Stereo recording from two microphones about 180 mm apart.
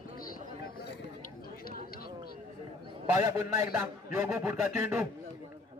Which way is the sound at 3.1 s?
20° right (ahead or behind).